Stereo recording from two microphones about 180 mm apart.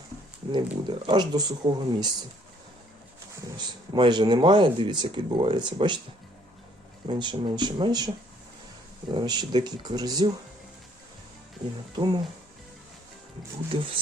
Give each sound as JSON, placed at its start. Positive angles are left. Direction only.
{"t": 0.5, "sound": "speech", "side_deg": -25}
{"t": 3.6, "sound": "speech", "side_deg": -25}
{"t": 7.1, "sound": "speech", "side_deg": -25}
{"t": 13.7, "sound": "speech", "side_deg": -30}